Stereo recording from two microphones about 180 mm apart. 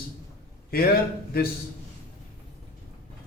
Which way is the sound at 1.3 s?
60° left (ahead or behind).